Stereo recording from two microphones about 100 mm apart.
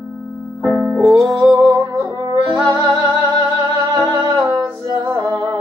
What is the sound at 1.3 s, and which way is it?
Music, 40° right (ahead or behind).